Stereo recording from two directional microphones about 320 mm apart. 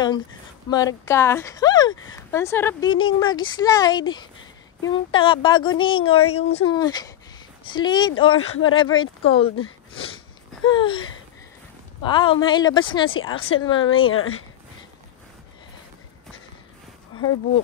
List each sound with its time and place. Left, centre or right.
0.7 s speech: centre
8.5 s speech: left
8.7 s speech: centre
10.7 s speech: centre
13.9 s speech: left